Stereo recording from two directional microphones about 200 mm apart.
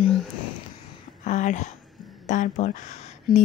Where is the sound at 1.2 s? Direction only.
40° left (ahead or behind).